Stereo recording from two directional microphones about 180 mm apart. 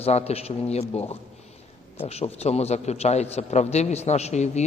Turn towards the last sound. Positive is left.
turn(degrees=40)  # may be behind; listen again after turning